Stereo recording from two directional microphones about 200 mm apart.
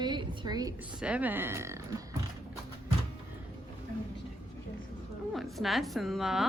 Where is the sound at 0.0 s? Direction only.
20° right (ahead or behind).